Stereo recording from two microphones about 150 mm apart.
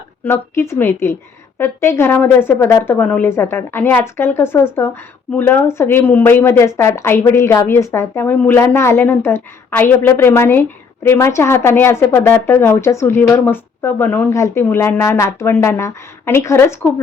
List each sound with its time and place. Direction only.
0.3 s a woman's voice: 15° left (ahead or behind)